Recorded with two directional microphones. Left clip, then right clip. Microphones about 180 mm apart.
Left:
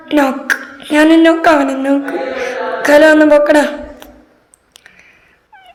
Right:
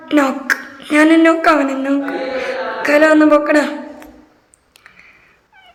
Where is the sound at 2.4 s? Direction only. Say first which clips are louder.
Left 3 dB; 5° left (ahead or behind).